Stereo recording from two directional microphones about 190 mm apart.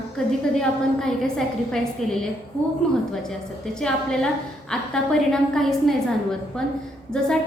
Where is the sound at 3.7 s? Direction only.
5° left (ahead or behind).